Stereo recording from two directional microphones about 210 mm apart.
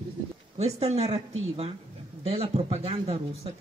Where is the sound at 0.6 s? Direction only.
30° right (ahead or behind).